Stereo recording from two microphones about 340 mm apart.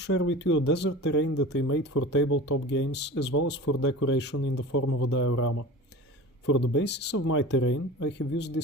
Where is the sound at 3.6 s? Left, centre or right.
Left.